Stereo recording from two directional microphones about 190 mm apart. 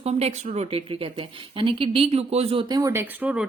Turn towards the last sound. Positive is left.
turn(degrees=-5)  # may be behind; listen again after turning